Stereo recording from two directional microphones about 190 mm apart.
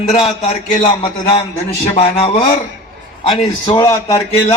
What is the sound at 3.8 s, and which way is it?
Speech, 20° left (ahead or behind).